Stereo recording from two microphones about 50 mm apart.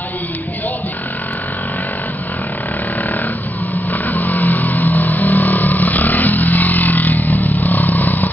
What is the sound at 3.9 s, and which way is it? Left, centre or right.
Vehicle, left.